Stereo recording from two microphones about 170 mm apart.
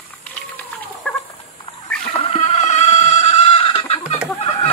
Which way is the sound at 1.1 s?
10° left (ahead or behind).